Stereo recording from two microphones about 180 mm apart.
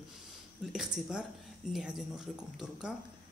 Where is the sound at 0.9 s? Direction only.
5° right (ahead or behind).